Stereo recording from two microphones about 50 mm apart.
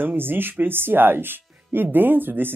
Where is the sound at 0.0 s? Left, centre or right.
Right.